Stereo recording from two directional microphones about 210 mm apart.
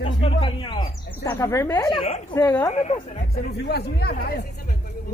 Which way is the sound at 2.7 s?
30° left (ahead or behind).